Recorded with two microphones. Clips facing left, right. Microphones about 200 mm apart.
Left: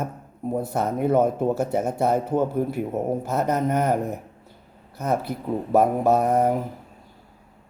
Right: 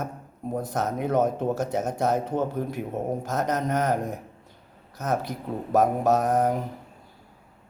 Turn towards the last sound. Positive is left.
turn(degrees=10)  # may be behind; listen again after turning